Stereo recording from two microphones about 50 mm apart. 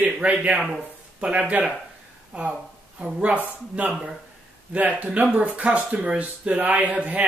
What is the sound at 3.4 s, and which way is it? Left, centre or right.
Speech, right.